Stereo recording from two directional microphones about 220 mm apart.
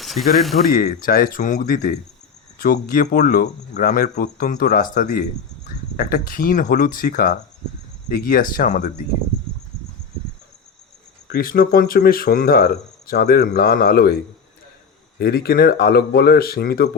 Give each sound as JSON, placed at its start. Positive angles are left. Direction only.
{"t": 0.0, "sound": "speech", "side_deg": 0}
{"t": 0.7, "sound": "speech", "side_deg": 40}
{"t": 11.3, "sound": "speech", "side_deg": 40}
{"t": 15.2, "sound": "speech", "side_deg": 45}